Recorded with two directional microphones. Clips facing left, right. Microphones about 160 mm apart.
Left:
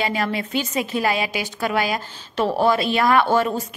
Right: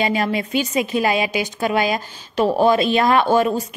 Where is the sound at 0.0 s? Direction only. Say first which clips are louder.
Right 3 dB; 20° right (ahead or behind).